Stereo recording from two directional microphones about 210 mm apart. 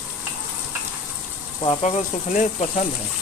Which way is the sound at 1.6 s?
35° left (ahead or behind).